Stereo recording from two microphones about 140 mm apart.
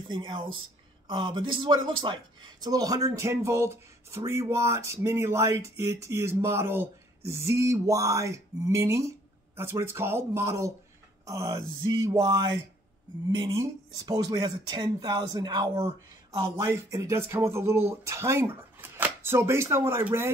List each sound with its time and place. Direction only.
0.1 s speech: 30° right (ahead or behind)